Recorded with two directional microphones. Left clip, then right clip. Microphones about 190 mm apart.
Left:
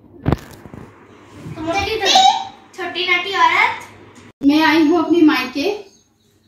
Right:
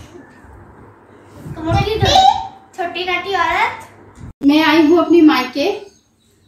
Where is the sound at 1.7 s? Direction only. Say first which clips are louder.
Right 1 dB; centre (ahead or behind).